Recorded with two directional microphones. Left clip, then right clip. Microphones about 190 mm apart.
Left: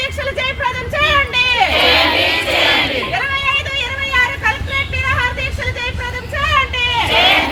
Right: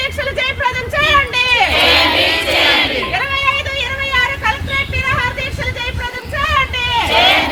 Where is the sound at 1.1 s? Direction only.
Centre (ahead or behind).